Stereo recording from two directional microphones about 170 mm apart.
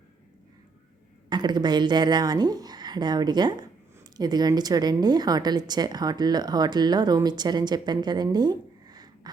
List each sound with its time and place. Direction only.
1.3 s a woman's voice: 25° right (ahead or behind)